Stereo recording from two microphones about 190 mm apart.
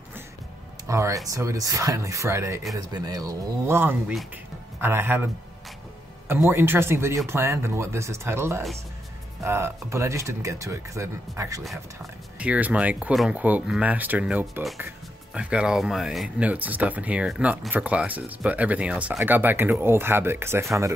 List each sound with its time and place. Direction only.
0.8 s speech: 15° right (ahead or behind)